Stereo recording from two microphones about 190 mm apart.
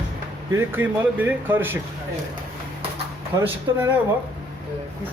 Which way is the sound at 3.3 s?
15° right (ahead or behind).